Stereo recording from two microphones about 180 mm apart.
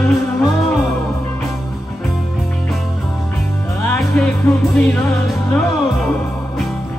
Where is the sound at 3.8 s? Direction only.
5° left (ahead or behind).